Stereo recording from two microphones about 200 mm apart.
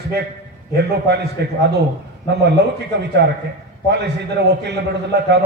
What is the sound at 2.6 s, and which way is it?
Speech, 55° right (ahead or behind).